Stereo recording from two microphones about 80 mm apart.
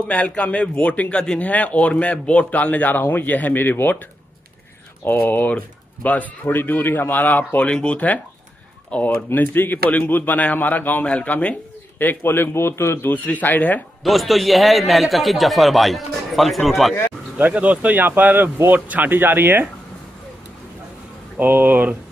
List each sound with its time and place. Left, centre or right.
0.1 s a man's voice: centre
5.0 s a man's voice: left
13.1 s a man's voice: left
14.0 s a man's voice: centre
17.4 s speech: right
21.4 s speech: right